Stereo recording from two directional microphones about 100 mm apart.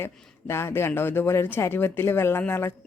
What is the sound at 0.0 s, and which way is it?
A woman's voice, 25° left (ahead or behind).